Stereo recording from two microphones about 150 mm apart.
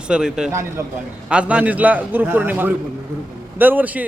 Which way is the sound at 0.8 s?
20° right (ahead or behind).